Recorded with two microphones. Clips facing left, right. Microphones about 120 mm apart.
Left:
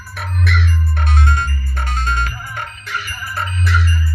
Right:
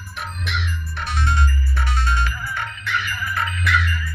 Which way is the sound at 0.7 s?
50° left (ahead or behind).